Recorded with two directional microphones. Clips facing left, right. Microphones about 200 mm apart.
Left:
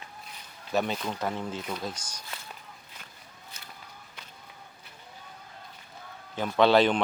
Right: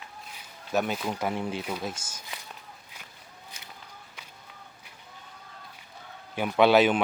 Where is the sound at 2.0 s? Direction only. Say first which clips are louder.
Even; 25° right (ahead or behind).